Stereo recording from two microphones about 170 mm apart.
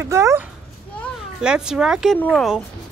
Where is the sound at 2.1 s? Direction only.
10° left (ahead or behind).